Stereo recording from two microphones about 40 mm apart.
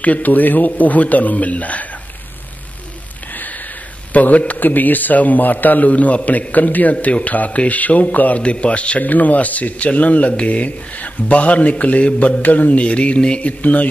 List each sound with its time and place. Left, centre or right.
0.0 s a man's voice: left
3.3 s a sound: left
4.1 s a man's voice: left
4.6 s a man's voice: left
8.4 s a man's voice: left
9.0 s a man's voice: left